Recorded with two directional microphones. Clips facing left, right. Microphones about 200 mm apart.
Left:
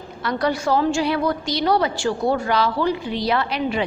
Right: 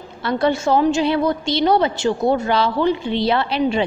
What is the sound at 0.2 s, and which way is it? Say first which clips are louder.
A woman's voice: right 3 dB; 25° right (ahead or behind).